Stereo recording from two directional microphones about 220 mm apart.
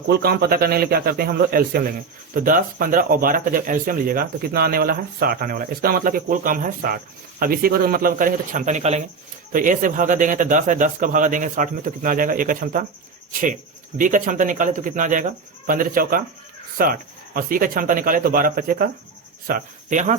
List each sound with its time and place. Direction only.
0.1 s a man's voice: 45° right (ahead or behind)
14.0 s a man's voice: 35° right (ahead or behind)